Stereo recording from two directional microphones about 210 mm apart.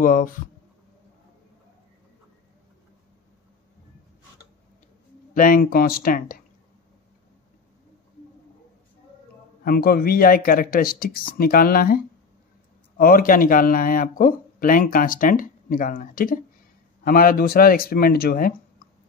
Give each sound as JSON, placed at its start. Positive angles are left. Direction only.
{"t": 0.0, "sound": "speech", "side_deg": 40}
{"t": 5.3, "sound": "speech", "side_deg": 40}
{"t": 9.7, "sound": "speech", "side_deg": 45}